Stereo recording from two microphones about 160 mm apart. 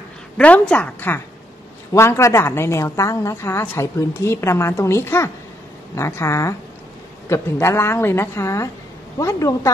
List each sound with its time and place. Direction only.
0.4 s a woman's voice: 10° left (ahead or behind)